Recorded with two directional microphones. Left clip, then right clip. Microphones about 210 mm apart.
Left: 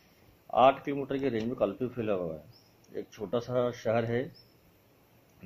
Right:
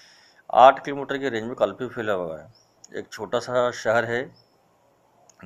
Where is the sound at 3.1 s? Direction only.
45° right (ahead or behind).